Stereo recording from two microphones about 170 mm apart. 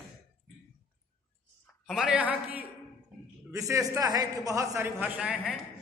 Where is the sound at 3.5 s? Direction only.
20° right (ahead or behind).